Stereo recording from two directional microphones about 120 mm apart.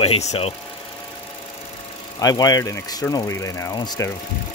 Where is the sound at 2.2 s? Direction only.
30° left (ahead or behind).